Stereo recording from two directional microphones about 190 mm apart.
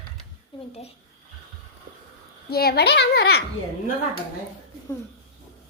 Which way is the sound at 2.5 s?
55° left (ahead or behind).